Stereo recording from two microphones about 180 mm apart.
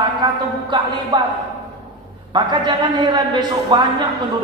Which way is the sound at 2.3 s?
25° right (ahead or behind).